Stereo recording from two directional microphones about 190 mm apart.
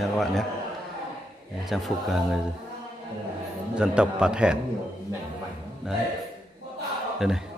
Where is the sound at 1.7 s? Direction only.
Centre (ahead or behind).